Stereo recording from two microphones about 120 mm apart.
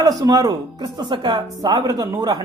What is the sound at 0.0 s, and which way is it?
Speech, 30° right (ahead or behind).